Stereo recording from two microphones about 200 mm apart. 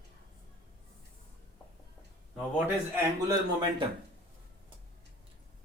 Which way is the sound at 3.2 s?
20° right (ahead or behind).